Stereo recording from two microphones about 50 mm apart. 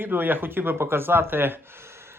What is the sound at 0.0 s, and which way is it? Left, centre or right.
Speech, right.